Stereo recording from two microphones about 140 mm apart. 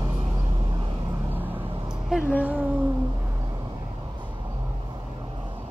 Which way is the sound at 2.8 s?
25° right (ahead or behind).